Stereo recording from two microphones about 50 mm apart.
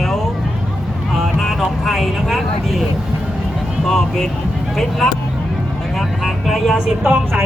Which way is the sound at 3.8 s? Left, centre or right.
Centre.